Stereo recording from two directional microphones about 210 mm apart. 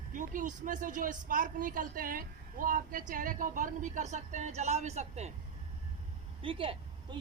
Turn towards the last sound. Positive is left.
turn(degrees=-25)  # may be behind; listen again after turning